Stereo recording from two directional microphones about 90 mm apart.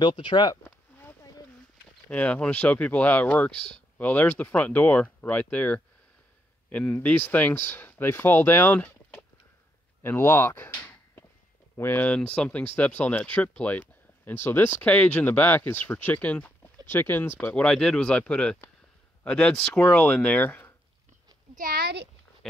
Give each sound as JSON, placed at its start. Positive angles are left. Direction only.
{"t": 0.0, "sound": "speech", "side_deg": 60}
{"t": 0.7, "sound": "a sound", "side_deg": 20}
{"t": 2.0, "sound": "speech", "side_deg": 15}
{"t": 17.6, "sound": "speech", "side_deg": 5}